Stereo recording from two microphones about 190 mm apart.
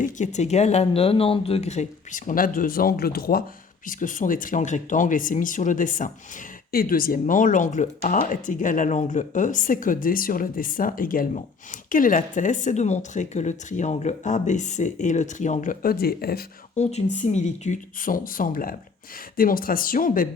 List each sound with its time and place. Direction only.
0.0 s speech: 40° left (ahead or behind)
16.7 s speech: 35° left (ahead or behind)